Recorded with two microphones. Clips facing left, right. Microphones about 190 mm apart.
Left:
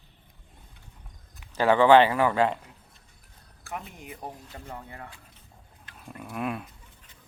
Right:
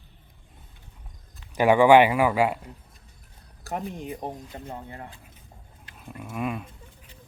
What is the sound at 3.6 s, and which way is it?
Speech, 40° right (ahead or behind).